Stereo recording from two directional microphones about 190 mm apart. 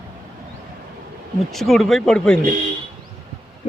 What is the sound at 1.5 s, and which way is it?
Speech, centre (ahead or behind).